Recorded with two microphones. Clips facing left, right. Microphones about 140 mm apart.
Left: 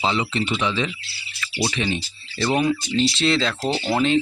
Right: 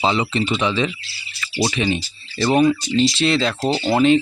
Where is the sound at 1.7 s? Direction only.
10° right (ahead or behind).